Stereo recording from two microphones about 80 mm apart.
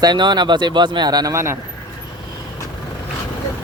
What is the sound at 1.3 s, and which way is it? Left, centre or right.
Speech, right.